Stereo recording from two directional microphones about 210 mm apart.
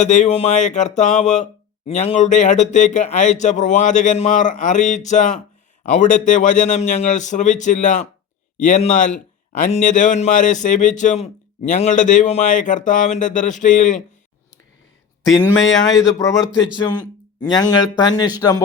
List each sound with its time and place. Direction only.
0.0 s speech: 35° left (ahead or behind)
15.3 s speech: centre (ahead or behind)
15.8 s speech: 20° left (ahead or behind)
17.4 s speech: 20° left (ahead or behind)